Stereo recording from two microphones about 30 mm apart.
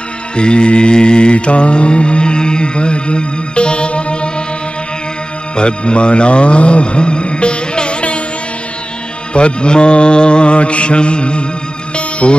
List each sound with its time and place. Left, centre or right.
0.4 s mantra: left
5.6 s speech: left
9.3 s mantra: left
11.9 s music: left